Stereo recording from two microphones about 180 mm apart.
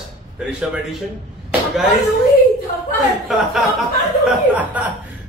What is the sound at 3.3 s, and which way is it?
Speech, centre (ahead or behind).